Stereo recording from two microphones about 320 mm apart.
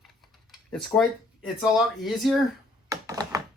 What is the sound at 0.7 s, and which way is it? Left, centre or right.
Speech, centre.